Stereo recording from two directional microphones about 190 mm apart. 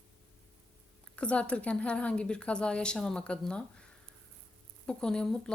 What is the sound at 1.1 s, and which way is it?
A woman's voice, 5° left (ahead or behind).